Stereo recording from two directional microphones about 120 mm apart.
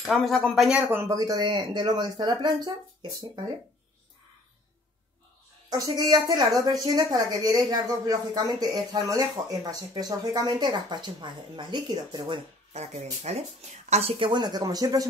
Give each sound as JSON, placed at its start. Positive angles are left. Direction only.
{"t": 0.0, "sound": "speech", "side_deg": 0}
{"t": 0.7, "sound": "speech", "side_deg": -10}
{"t": 1.0, "sound": "a woman's voice", "side_deg": -30}
{"t": 5.7, "sound": "a woman's voice", "side_deg": -35}
{"t": 12.7, "sound": "speech", "side_deg": -65}